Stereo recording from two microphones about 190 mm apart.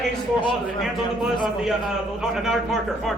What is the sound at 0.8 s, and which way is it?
A man's voice, centre (ahead or behind).